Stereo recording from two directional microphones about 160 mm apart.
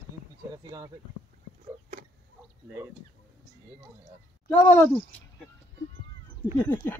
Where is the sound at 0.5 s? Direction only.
20° right (ahead or behind).